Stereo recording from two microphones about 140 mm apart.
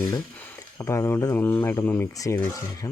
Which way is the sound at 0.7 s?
20° left (ahead or behind).